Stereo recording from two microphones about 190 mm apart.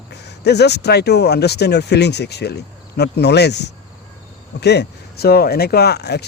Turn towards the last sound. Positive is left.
turn(degrees=60)  # may be behind; listen again after turning